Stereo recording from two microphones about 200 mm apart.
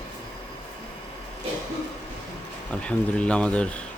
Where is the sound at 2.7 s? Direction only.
5° left (ahead or behind).